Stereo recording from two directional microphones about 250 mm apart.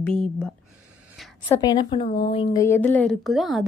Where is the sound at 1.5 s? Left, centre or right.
Centre.